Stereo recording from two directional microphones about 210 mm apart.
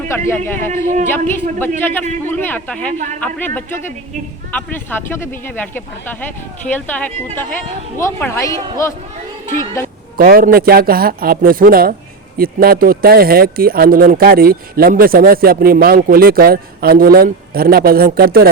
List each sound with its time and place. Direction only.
0.1 s speech: 10° left (ahead or behind)
10.2 s speech: 45° right (ahead or behind)